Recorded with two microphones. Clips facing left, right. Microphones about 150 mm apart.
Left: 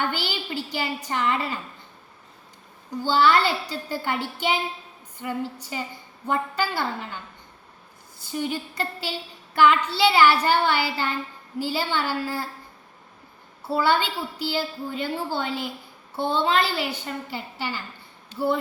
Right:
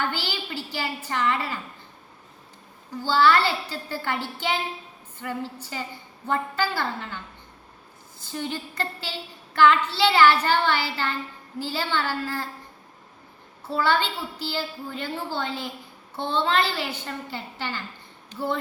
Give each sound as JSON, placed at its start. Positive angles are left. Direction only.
{"t": 0.0, "sound": "a woman's voice", "side_deg": 15}
{"t": 3.0, "sound": "a woman's voice", "side_deg": 15}
{"t": 8.2, "sound": "a woman's voice", "side_deg": 10}
{"t": 13.7, "sound": "a woman's voice", "side_deg": 10}